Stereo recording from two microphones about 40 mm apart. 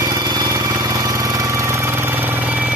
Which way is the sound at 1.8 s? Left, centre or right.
Right.